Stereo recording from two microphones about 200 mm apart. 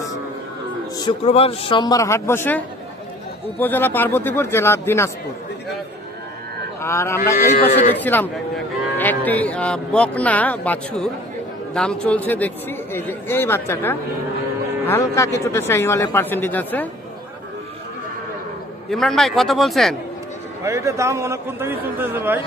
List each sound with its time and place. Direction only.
1.2 s a man's voice: 30° left (ahead or behind); by 5.1 s 15° left (ahead or behind)
6.8 s a man's voice: 15° left (ahead or behind)
7.3 s speech: 50° left (ahead or behind)
7.9 s a man's voice: 10° left (ahead or behind)
18.9 s speech: centre (ahead or behind)
20.6 s a man's voice: 15° right (ahead or behind)